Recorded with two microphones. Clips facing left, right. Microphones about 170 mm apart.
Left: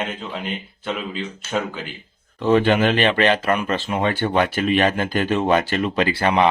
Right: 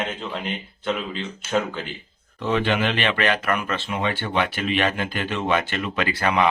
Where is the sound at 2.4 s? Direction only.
40° left (ahead or behind).